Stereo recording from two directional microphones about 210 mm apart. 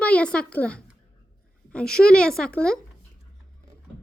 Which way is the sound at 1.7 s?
5° left (ahead or behind).